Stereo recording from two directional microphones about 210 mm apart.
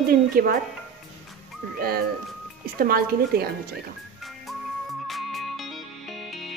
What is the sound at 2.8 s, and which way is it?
Speech, 45° right (ahead or behind).